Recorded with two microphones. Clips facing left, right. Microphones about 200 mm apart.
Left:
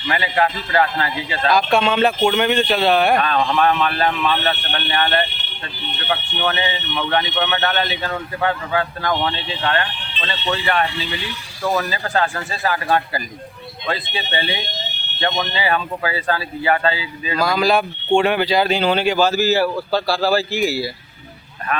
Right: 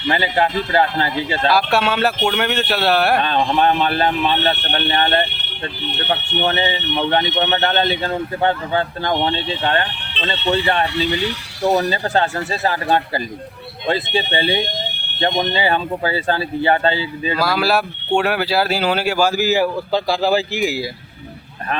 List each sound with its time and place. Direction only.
0.1 s speech: 30° right (ahead or behind)
1.5 s speech: 5° right (ahead or behind)
3.2 s speech: 30° right (ahead or behind)
14.6 s fire alarm: 55° right (ahead or behind)
15.4 s speech: 30° right (ahead or behind)
17.4 s speech: 5° right (ahead or behind)